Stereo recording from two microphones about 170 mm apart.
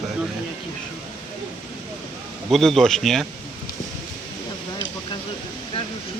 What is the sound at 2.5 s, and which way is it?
Speech, centre (ahead or behind).